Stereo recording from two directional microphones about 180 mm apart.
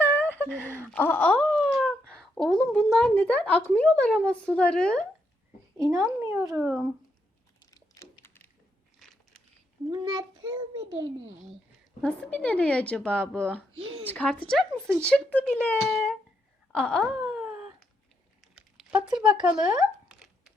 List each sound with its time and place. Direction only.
0.0 s a sound: 10° left (ahead or behind)
4.3 s speech: 5° left (ahead or behind)
6.1 s speech: 10° right (ahead or behind)
7.6 s a sound: 20° left (ahead or behind)
9.0 s biting: centre (ahead or behind)
9.9 s a child's voice: 25° right (ahead or behind)
12.0 s speech: 5° left (ahead or behind)
16.7 s wail: 5° left (ahead or behind)
18.5 s a sound: 5° right (ahead or behind)